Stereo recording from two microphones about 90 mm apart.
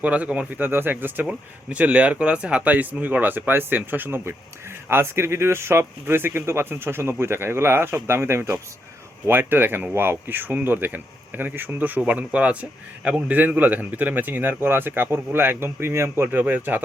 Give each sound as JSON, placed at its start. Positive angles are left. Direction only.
{"t": 0.0, "sound": "speech", "side_deg": -15}